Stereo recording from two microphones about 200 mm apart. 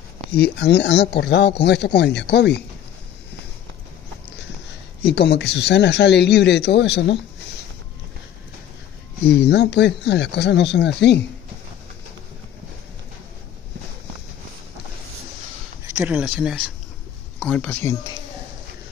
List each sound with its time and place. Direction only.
0.3 s speech: 55° left (ahead or behind)
5.0 s speech: 55° left (ahead or behind)
9.2 s speech: 60° left (ahead or behind)
15.9 s speech: 10° right (ahead or behind)
17.4 s speech: 5° left (ahead or behind)